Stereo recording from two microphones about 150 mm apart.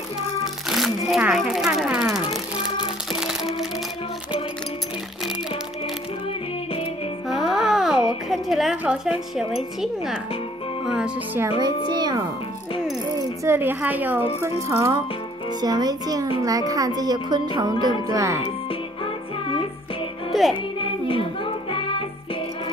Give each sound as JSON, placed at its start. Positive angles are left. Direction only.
{"t": 0.7, "sound": "speech", "side_deg": 0}
{"t": 3.1, "sound": "music", "side_deg": -5}
{"t": 7.2, "sound": "music", "side_deg": 0}
{"t": 9.4, "sound": "speech", "side_deg": 0}
{"t": 12.0, "sound": "speech", "side_deg": -25}
{"t": 13.4, "sound": "a woman's voice", "side_deg": -15}
{"t": 18.4, "sound": "music", "side_deg": 35}
{"t": 20.3, "sound": "music", "side_deg": 0}
{"t": 20.8, "sound": "music", "side_deg": 35}